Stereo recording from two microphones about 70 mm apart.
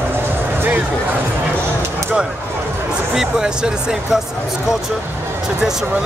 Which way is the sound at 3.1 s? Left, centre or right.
Centre.